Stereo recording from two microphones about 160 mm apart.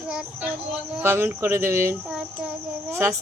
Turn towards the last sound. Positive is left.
turn(degrees=-15)  # may be behind; listen again after turning